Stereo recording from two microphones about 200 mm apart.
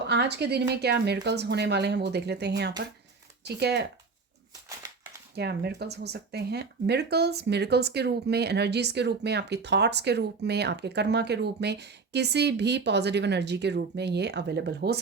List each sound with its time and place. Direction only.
0.1 s speech: 55° right (ahead or behind)
5.3 s speech: 55° right (ahead or behind)